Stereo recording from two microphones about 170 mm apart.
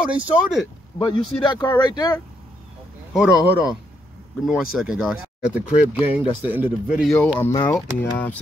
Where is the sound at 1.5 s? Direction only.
25° left (ahead or behind).